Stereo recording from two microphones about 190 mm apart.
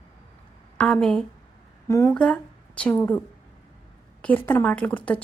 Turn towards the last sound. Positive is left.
turn(degrees=5)  # may be behind; listen again after turning